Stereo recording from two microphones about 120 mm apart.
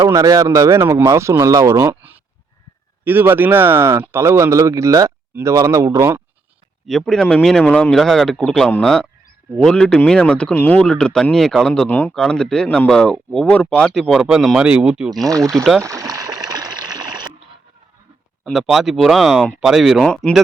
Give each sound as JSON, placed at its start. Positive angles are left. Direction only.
{"t": 0.0, "sound": "speech", "side_deg": -30}
{"t": 6.8, "sound": "speech", "side_deg": 5}
{"t": 15.8, "sound": "water", "side_deg": -25}
{"t": 18.5, "sound": "speech", "side_deg": -5}